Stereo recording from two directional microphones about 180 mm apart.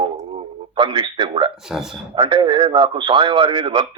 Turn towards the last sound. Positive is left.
turn(degrees=-30)  # may be behind; listen again after turning